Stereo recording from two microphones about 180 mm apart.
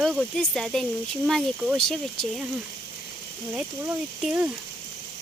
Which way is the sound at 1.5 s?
10° right (ahead or behind).